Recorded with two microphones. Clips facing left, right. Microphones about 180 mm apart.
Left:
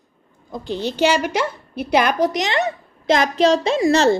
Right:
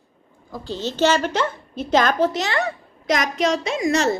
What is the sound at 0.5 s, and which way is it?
A woman's voice, 15° left (ahead or behind).